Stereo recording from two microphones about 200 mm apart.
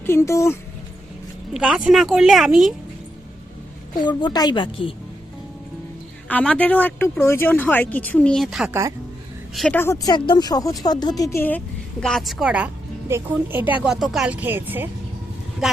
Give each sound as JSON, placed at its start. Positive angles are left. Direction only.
{"t": 0.0, "sound": "speech", "side_deg": 15}
{"t": 1.5, "sound": "speech", "side_deg": -5}
{"t": 4.0, "sound": "speech", "side_deg": 20}
{"t": 6.2, "sound": "speech", "side_deg": 5}